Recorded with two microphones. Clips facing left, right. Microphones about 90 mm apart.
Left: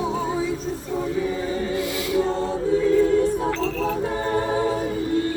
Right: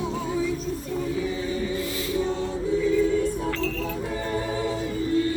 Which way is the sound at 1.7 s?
75° left (ahead or behind).